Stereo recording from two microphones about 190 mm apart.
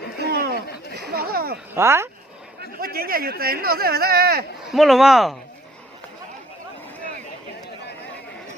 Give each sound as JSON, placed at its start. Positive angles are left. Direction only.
{"t": 0.2, "sound": "a sound", "side_deg": -60}
{"t": 1.7, "sound": "speech", "side_deg": -15}
{"t": 2.6, "sound": "speech", "side_deg": -50}
{"t": 4.7, "sound": "speech", "side_deg": 0}